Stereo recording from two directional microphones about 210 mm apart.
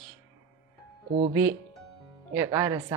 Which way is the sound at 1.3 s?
10° right (ahead or behind).